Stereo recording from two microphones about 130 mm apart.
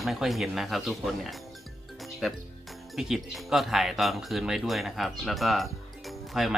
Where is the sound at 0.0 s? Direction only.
Centre (ahead or behind).